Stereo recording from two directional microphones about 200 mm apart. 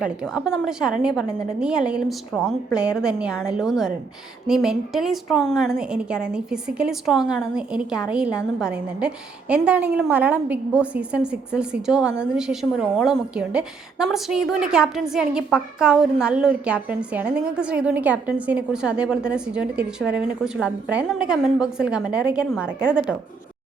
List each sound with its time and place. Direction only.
0.0 s a woman's voice: 5° right (ahead or behind)